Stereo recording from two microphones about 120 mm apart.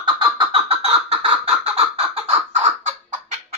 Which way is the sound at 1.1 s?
50° right (ahead or behind).